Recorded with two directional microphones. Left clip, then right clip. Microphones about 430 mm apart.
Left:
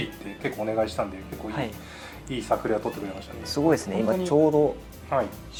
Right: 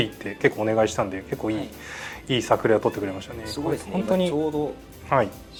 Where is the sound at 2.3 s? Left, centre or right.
Right.